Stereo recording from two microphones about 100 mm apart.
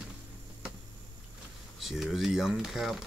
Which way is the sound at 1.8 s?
Centre (ahead or behind).